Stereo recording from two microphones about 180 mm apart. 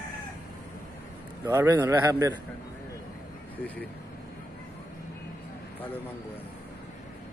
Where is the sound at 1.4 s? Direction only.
20° right (ahead or behind).